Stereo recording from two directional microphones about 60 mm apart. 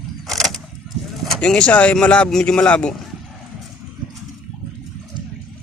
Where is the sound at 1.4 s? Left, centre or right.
Centre.